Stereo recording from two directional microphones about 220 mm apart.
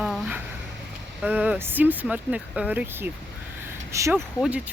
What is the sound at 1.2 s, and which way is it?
Speech, 5° right (ahead or behind).